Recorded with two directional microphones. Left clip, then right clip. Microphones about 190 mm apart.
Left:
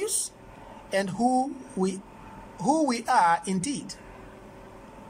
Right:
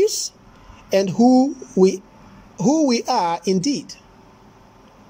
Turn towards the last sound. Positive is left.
turn(degrees=-15)  # may be behind; listen again after turning